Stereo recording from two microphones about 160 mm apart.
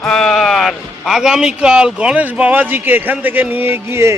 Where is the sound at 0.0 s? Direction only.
5° left (ahead or behind).